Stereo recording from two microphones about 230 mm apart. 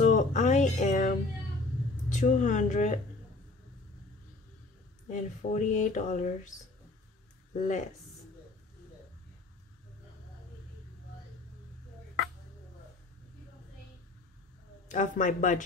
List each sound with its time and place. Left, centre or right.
0.0 s a sound: left
2.0 s speech: left
5.0 s speech: left
7.5 s speech: left
14.9 s speech: left